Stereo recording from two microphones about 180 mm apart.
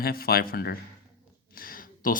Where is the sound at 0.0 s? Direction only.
55° left (ahead or behind).